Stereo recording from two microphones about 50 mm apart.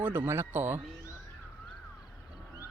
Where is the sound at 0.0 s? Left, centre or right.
Right.